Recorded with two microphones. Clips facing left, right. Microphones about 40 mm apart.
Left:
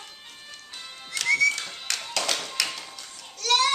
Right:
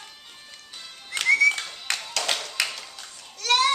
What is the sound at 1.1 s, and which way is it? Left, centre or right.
Music, right.